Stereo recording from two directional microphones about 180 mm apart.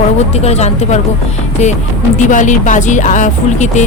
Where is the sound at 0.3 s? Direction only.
35° left (ahead or behind).